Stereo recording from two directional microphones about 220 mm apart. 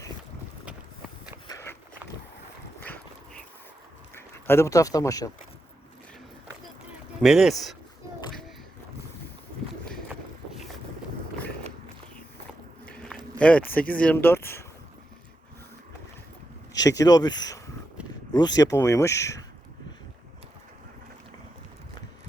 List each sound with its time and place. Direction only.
1.5 s walk: 15° left (ahead or behind)
4.1 s speech: 10° left (ahead or behind)
7.2 s speech: centre (ahead or behind)
12.8 s a sound: 5° left (ahead or behind)
16.7 s speech: 15° left (ahead or behind)